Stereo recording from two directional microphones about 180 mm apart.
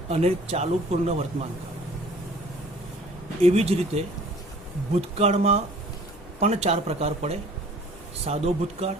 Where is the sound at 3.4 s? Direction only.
35° right (ahead or behind).